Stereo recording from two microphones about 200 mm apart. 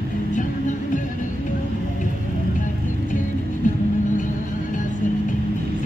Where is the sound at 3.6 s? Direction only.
40° left (ahead or behind).